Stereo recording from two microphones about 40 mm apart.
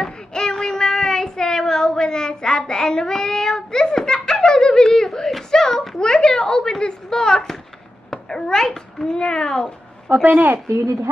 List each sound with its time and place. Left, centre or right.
0.0 s child singing: centre
5.5 s a sound: centre
6.4 s a woman's voice: left
8.1 s a sound: centre
8.9 s a child's voice: centre
10.1 s a woman's voice: right